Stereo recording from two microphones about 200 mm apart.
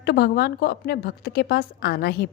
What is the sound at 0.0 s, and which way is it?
A woman's voice, 55° left (ahead or behind).